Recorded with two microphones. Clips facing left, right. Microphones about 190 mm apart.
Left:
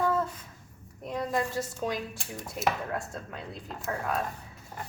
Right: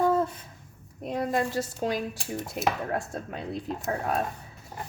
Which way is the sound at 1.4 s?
30° right (ahead or behind).